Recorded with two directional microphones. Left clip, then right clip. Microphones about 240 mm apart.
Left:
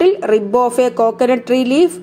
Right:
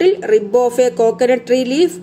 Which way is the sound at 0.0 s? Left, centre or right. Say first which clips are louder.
Even; centre.